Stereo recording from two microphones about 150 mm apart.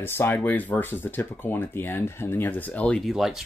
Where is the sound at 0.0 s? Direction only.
15° left (ahead or behind).